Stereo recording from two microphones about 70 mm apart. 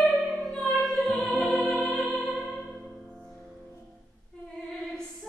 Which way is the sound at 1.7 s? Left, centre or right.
Centre.